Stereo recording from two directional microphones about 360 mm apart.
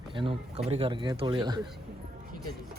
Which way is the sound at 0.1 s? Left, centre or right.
Centre.